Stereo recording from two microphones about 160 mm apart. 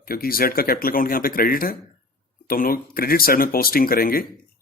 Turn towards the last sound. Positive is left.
turn(degrees=65)  # may be behind; listen again after turning